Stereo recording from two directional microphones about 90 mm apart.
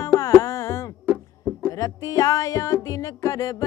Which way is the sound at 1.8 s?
40° left (ahead or behind).